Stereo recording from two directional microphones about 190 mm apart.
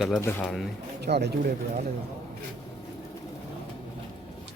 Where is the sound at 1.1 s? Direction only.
60° right (ahead or behind).